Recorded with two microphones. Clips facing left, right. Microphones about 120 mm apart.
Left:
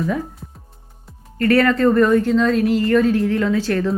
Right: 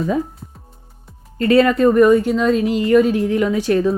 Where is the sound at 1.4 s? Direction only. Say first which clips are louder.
Right 2 dB; 20° right (ahead or behind).